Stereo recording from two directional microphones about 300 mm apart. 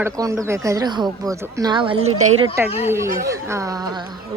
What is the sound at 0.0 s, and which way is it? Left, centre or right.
Speech, centre.